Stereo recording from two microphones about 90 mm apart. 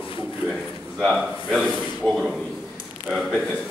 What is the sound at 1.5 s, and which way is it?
Speech, 5° right (ahead or behind).